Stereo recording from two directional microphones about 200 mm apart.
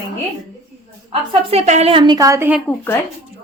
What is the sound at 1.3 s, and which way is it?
A woman's voice, 30° right (ahead or behind).